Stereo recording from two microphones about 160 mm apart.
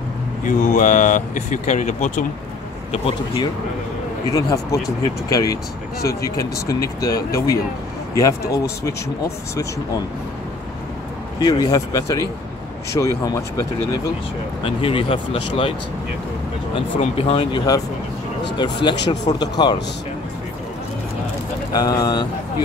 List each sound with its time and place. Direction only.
0.5 s speech: 55° left (ahead or behind)
2.9 s speech: 35° left (ahead or behind)
4.3 s speech: 20° left (ahead or behind)
11.3 s speech: 25° left (ahead or behind)
14.6 s speech: 35° left (ahead or behind)
16.7 s speech: 35° left (ahead or behind)
21.7 s speech: 25° left (ahead or behind)